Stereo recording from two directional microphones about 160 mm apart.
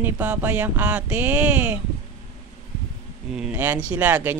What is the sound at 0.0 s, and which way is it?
Speech, 10° right (ahead or behind).